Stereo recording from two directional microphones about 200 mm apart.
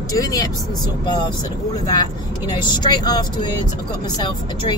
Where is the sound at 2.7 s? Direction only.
20° left (ahead or behind).